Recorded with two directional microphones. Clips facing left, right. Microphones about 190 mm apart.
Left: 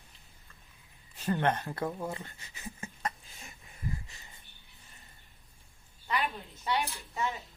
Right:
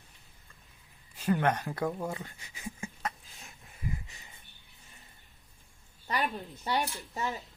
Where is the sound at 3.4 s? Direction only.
Centre (ahead or behind).